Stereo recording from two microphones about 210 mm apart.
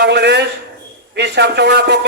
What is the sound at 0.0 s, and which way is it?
A man's voice, 50° right (ahead or behind).